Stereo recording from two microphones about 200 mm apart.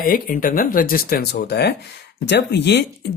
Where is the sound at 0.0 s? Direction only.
45° left (ahead or behind).